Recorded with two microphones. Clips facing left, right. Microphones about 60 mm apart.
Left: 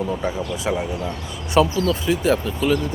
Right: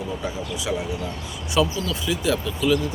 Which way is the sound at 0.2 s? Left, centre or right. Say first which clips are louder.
Left 4 dB; left.